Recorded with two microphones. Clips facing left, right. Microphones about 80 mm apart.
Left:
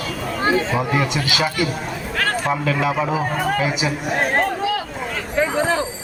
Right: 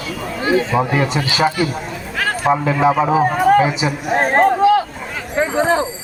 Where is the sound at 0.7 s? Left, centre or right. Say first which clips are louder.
Right 3 dB; right.